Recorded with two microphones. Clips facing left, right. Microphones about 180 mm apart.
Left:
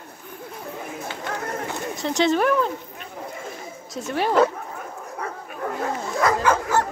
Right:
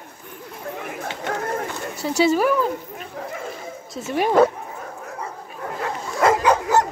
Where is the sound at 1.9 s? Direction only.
10° right (ahead or behind).